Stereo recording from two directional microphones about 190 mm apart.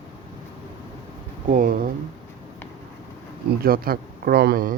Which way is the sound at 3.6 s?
50° right (ahead or behind).